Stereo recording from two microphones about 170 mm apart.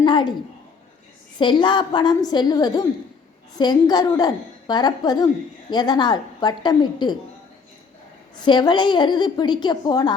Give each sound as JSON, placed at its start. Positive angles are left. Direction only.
{"t": 0.0, "sound": "a woman's voice", "side_deg": 25}
{"t": 1.4, "sound": "a woman's voice", "side_deg": 30}
{"t": 8.4, "sound": "a woman's voice", "side_deg": 25}